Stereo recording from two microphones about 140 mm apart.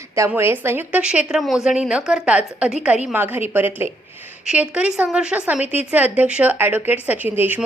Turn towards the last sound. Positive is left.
turn(degrees=-10)  # may be behind; listen again after turning